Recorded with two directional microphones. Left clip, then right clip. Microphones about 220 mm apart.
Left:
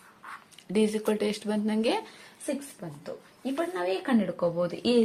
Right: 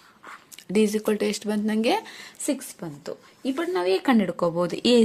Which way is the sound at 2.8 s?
45° right (ahead or behind).